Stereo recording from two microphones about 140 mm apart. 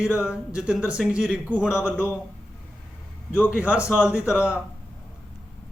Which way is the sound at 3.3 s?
15° left (ahead or behind).